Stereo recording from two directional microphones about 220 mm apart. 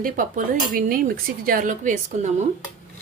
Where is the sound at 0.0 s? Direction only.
35° right (ahead or behind).